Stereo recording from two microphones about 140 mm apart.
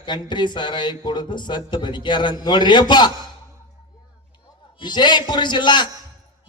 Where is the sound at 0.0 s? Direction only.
35° left (ahead or behind).